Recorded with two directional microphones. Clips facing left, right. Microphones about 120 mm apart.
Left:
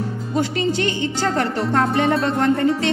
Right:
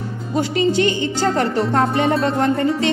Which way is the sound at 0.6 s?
10° right (ahead or behind).